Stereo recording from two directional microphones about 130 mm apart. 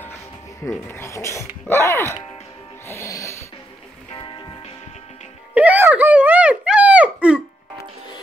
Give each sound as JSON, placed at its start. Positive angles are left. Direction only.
{"t": 0.7, "sound": "speech", "side_deg": 20}
{"t": 2.9, "sound": "music", "side_deg": 20}
{"t": 4.1, "sound": "music", "side_deg": 35}
{"t": 5.5, "sound": "a sound", "side_deg": -10}